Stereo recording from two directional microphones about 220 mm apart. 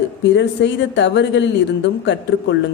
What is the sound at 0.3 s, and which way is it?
A woman's voice, 55° left (ahead or behind).